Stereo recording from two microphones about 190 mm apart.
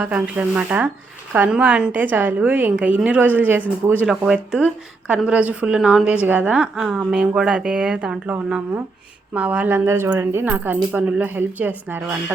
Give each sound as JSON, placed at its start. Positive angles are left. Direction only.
{"t": 0.0, "sound": "a woman's voice", "side_deg": -5}